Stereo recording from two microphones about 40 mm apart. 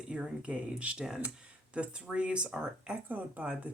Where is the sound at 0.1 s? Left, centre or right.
Centre.